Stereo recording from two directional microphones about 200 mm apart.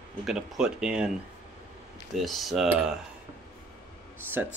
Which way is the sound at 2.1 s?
Centre (ahead or behind).